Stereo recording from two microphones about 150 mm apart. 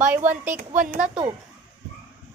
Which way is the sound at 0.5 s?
55° right (ahead or behind).